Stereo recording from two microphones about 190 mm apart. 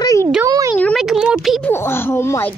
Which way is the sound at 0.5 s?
20° right (ahead or behind).